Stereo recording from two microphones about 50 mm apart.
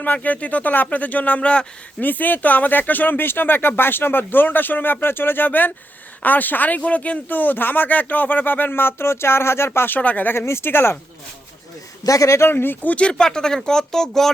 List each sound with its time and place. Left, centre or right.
0.0 s speech: left
2.0 s speech: left
10.0 s speech: left
10.3 s speech: left
12.0 s speech: left
12.5 s speech: left
12.9 s speech: left